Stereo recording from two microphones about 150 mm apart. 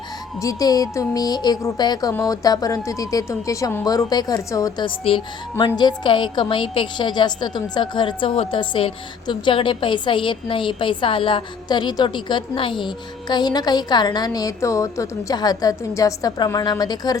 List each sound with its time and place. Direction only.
0.3 s a woman's voice: 25° left (ahead or behind)
4.9 s a woman's voice: 35° left (ahead or behind)